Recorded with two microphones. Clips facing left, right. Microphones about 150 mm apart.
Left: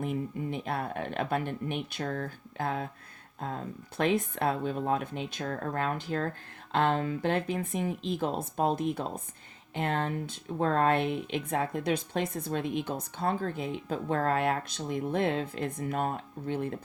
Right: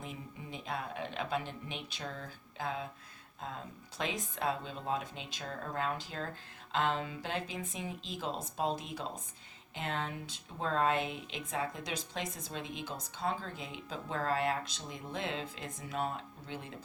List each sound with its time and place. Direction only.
0.0 s speech: 55° left (ahead or behind)